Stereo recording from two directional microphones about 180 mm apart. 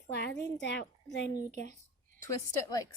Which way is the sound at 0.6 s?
75° left (ahead or behind).